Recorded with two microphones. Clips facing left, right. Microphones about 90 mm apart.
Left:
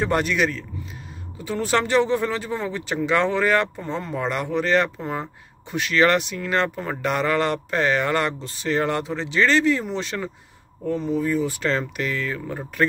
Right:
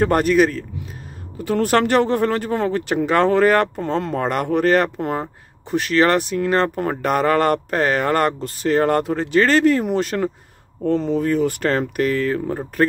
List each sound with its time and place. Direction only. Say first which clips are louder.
0.0 s speech: right 6 dB; 45° right (ahead or behind)
1.4 s speech: right 5 dB; 60° right (ahead or behind)
3.8 s speech: right 5 dB; 70° right (ahead or behind); by 10.3 s 50° right (ahead or behind)
10.9 s speech: right 4 dB; 90° right; by 11.8 s 55° right (ahead or behind)
11.8 s speech: right 7 dB; 45° right (ahead or behind)